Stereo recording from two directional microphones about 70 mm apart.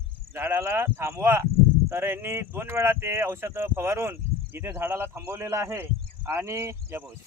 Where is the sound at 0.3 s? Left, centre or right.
Right.